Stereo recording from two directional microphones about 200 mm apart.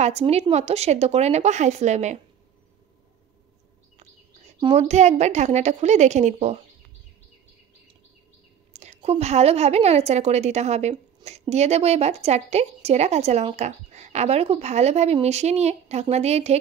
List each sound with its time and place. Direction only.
0.0 s a woman's voice: 30° right (ahead or behind)
4.6 s a woman's voice: 30° right (ahead or behind)
8.7 s a woman's voice: 35° right (ahead or behind)